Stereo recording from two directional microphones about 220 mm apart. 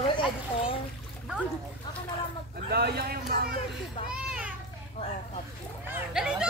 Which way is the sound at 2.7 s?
45° right (ahead or behind).